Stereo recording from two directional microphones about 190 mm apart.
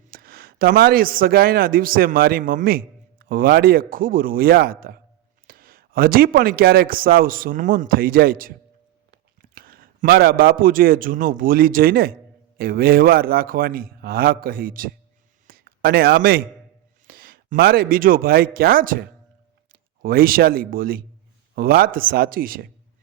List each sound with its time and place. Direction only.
0.1 s a man's voice: 50° right (ahead or behind)
15.4 s a sound: 50° right (ahead or behind)
15.8 s a man's voice: 55° right (ahead or behind)